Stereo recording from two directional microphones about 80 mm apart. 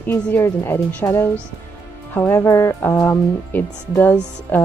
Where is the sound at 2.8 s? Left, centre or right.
Left.